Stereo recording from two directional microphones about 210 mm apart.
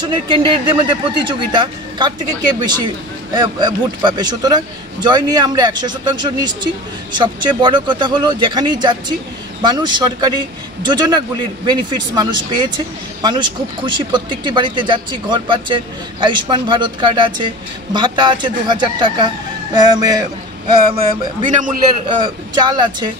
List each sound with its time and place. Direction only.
0.1 s speech: 25° right (ahead or behind)